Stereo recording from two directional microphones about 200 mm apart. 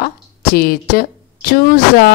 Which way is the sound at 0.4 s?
50° left (ahead or behind).